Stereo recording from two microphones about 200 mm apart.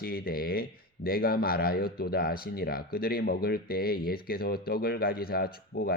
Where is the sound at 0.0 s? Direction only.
50° left (ahead or behind).